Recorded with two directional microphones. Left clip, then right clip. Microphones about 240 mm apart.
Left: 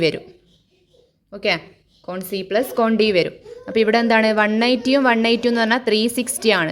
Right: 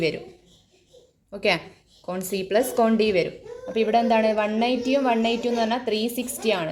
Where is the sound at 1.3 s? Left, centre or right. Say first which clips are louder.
Left 2 dB; centre.